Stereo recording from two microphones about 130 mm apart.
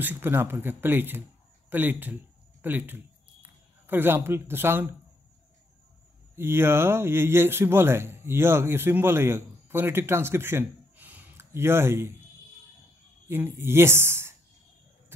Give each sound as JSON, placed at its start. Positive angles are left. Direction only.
{"t": 0.0, "sound": "speech", "side_deg": -15}
{"t": 6.3, "sound": "speech", "side_deg": -20}
{"t": 13.3, "sound": "speech", "side_deg": -20}